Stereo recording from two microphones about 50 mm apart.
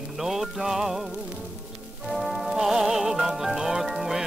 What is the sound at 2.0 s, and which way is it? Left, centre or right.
Music, centre.